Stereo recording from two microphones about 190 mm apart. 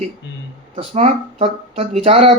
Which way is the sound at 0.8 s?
35° right (ahead or behind).